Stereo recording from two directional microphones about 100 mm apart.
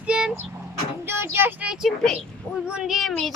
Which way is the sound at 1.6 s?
5° right (ahead or behind).